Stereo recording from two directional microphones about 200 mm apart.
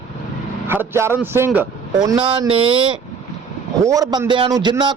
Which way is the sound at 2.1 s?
25° right (ahead or behind).